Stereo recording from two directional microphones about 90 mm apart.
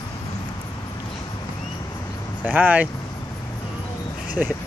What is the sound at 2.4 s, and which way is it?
Speech, 20° right (ahead or behind).